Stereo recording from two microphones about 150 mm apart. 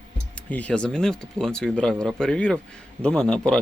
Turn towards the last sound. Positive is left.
turn(degrees=5)  # may be behind; listen again after turning